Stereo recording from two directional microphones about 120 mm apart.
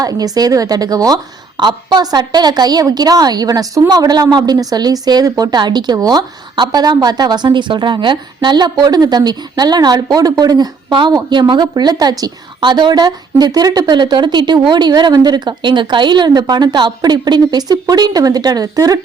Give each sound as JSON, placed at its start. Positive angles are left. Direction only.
{"t": 0.0, "sound": "a woman's voice", "side_deg": -30}